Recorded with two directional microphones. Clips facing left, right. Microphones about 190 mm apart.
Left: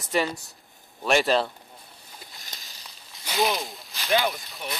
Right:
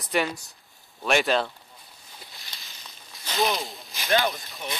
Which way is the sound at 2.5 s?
45° left (ahead or behind).